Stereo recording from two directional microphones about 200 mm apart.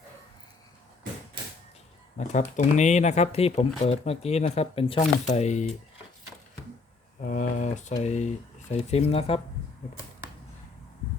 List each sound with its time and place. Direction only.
2.1 s speech: 35° left (ahead or behind)
7.3 s speech: 40° left (ahead or behind)